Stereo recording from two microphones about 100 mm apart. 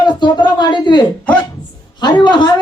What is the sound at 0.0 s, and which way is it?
Speech, 45° left (ahead or behind).